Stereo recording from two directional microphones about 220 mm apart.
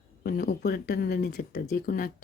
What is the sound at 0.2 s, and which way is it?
Speech, 45° left (ahead or behind).